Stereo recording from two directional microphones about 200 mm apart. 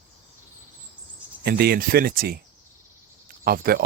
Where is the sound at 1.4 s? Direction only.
50° right (ahead or behind).